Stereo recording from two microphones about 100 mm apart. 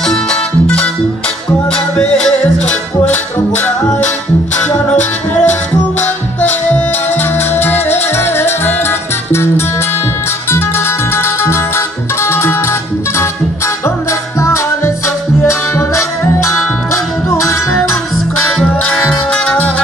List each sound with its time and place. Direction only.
0.1 s music: 10° left (ahead or behind)
4.9 s music: 15° left (ahead or behind)
7.5 s music: 20° left (ahead or behind)
12.2 s music: 25° left (ahead or behind)
16.4 s music: 30° left (ahead or behind)
18.6 s music: 5° left (ahead or behind)